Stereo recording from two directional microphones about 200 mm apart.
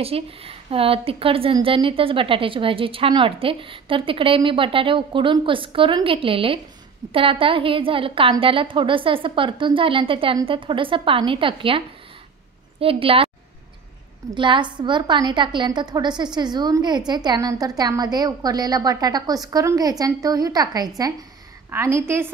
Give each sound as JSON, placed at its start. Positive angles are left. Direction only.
{"t": 0.0, "sound": "a woman's voice", "side_deg": -30}
{"t": 12.8, "sound": "a woman's voice", "side_deg": -30}
{"t": 14.3, "sound": "a woman's voice", "side_deg": -25}